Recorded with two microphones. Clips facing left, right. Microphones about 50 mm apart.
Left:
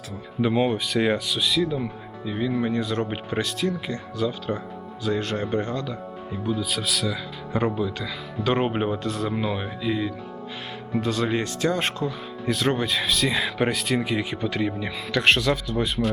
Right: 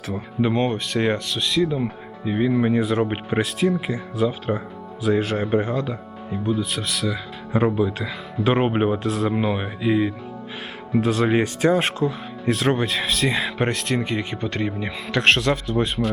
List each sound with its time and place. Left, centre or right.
0.5 s speech: centre
1.7 s speech: right; by 7.7 s centre
7.8 s speech: right
8.4 s speech: centre
9.3 s speech: centre
11.2 s speech: centre
11.7 s speech: centre